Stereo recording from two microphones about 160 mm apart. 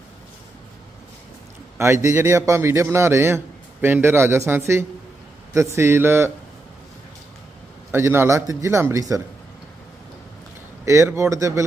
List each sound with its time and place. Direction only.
1.8 s a man's voice: 20° right (ahead or behind)
7.9 s a man's voice: 15° right (ahead or behind)
10.8 s a man's voice: 20° right (ahead or behind)